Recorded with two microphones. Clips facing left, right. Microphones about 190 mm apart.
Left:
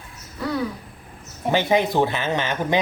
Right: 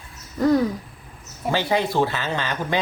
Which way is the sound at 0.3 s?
45° right (ahead or behind).